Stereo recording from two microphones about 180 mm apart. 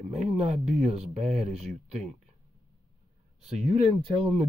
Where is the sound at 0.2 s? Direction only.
40° right (ahead or behind).